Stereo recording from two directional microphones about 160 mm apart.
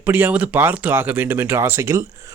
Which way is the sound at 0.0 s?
10° right (ahead or behind).